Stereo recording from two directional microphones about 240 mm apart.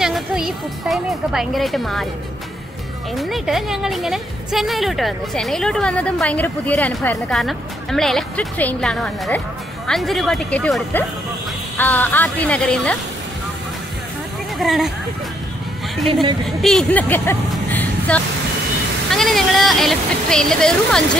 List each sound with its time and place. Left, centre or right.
0.0 s a woman's voice: centre
3.2 s a woman's voice: centre
14.6 s a woman's voice: centre
16.1 s a woman's voice: centre
16.4 s a woman's voice: centre